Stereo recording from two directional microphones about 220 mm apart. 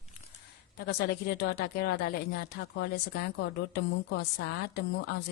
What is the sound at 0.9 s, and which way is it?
Speech, 45° left (ahead or behind).